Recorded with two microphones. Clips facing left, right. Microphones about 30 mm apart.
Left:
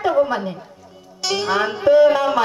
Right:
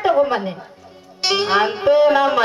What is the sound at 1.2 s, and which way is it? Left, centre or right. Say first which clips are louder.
A woman's voice: right 3 dB; right.